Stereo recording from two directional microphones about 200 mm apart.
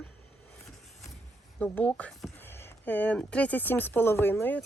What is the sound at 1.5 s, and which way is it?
Speech, 5° left (ahead or behind).